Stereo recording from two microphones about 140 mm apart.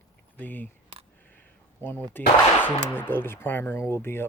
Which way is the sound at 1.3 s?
15° left (ahead or behind).